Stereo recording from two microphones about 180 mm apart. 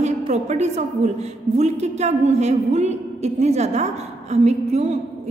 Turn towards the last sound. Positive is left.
turn(degrees=-40)  # may be behind; listen again after turning